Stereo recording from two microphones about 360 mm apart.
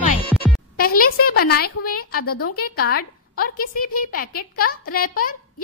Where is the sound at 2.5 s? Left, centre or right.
Left.